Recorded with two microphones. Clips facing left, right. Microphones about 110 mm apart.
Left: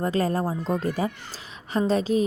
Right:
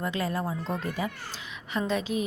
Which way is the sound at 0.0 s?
40° left (ahead or behind).